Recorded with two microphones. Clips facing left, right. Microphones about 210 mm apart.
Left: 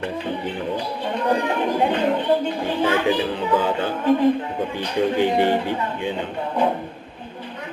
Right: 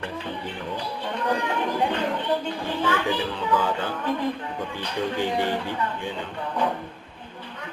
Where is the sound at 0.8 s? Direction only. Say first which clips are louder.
Left 5 dB; 20° left (ahead or behind).